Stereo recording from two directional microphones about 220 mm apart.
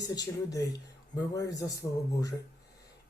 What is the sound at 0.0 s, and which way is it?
Speech, 15° left (ahead or behind).